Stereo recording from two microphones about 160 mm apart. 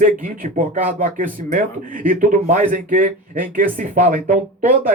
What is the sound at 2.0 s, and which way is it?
A man's voice, 55° right (ahead or behind).